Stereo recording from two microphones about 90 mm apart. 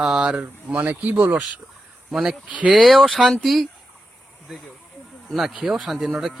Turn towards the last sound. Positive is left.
turn(degrees=-5)  # may be behind; listen again after turning